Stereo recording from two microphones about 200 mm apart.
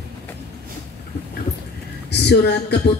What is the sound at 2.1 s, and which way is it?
Speech, 55° left (ahead or behind).